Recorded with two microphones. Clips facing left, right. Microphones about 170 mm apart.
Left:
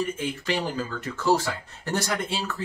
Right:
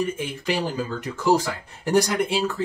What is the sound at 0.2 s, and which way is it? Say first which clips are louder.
Speech: right 2 dB; 10° right (ahead or behind).